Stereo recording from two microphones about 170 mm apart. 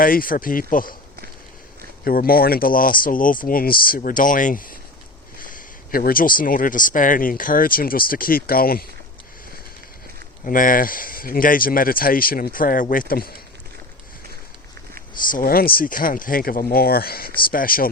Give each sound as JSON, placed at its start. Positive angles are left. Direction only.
{"t": 0.0, "sound": "speech", "side_deg": 55}
{"t": 2.0, "sound": "speech", "side_deg": 60}
{"t": 10.4, "sound": "speech", "side_deg": 55}
{"t": 15.3, "sound": "speech", "side_deg": 55}